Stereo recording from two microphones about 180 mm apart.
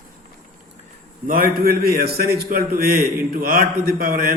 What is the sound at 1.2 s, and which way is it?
A man's voice, 50° right (ahead or behind).